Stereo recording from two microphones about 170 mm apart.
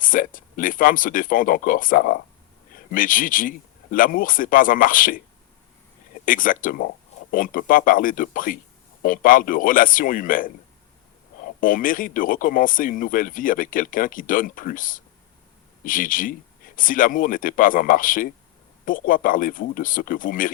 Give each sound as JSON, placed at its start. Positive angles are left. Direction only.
{"t": 0.0, "sound": "speech", "side_deg": 55}
{"t": 6.2, "sound": "speech", "side_deg": 55}
{"t": 11.6, "sound": "speech", "side_deg": 55}